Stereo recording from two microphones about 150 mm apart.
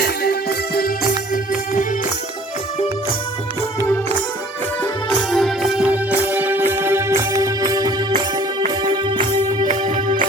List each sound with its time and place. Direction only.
0.0 s music: 90° left
3.8 s music: 15° left (ahead or behind)
4.8 s music: 5° left (ahead or behind); by 9.6 s 30° right (ahead or behind)